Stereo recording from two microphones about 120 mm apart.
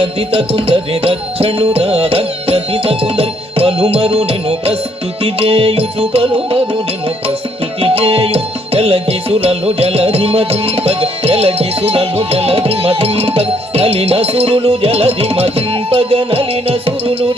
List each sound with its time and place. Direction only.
0.2 s music: 55° right (ahead or behind)
7.8 s music: 55° right (ahead or behind)